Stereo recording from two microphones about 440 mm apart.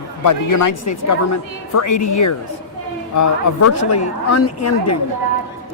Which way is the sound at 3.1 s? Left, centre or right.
Left.